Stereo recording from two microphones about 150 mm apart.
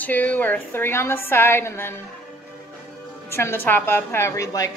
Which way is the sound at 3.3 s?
15° left (ahead or behind).